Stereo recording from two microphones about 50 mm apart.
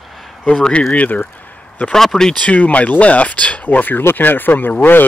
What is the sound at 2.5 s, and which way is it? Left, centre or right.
Speech, left.